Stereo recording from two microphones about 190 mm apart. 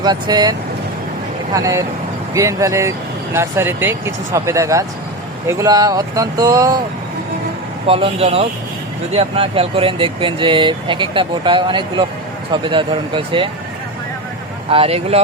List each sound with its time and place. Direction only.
0.0 s speech: 20° right (ahead or behind)
1.5 s speech: 15° right (ahead or behind)
7.9 s speech: 30° right (ahead or behind)
14.7 s speech: 30° right (ahead or behind)